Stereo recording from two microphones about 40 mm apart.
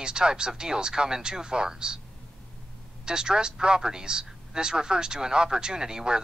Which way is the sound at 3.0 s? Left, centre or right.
Centre.